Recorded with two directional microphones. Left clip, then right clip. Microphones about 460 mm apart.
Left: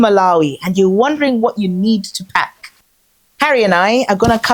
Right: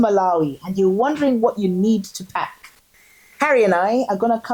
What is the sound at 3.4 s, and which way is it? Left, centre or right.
Speech, left.